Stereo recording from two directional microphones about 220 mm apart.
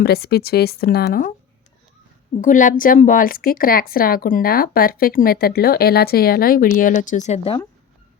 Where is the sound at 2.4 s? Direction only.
35° left (ahead or behind).